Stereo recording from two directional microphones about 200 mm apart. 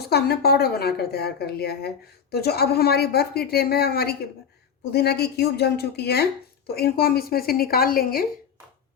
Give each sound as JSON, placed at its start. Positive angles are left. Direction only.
{"t": 0.0, "sound": "a woman's voice", "side_deg": 50}